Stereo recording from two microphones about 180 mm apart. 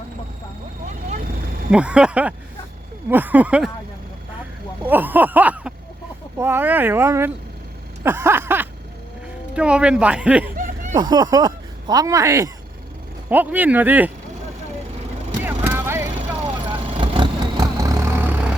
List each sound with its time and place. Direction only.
1.0 s vehicle: 45° right (ahead or behind)
1.7 s a sound: 5° right (ahead or behind)
4.9 s a sound: 10° right (ahead or behind)
9.6 s speech: 5° right (ahead or behind)
10.5 s snicker: 50° right (ahead or behind)
10.9 s speech: 20° right (ahead or behind)
13.3 s a sound: 10° right (ahead or behind)
15.4 s vehicle: 10° right (ahead or behind)
16.4 s vehicle: 30° right (ahead or behind); by 18.3 s 10° right (ahead or behind)